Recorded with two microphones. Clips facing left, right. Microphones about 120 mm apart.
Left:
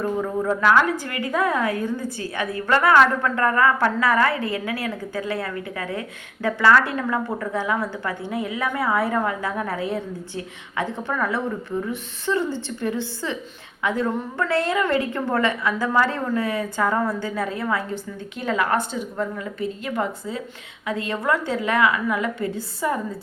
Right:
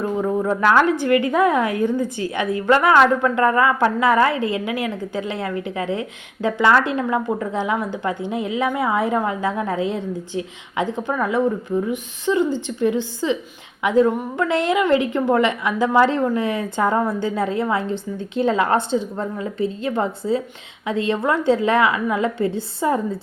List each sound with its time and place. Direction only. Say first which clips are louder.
0.0 s a woman's voice: right 3 dB; 20° right (ahead or behind)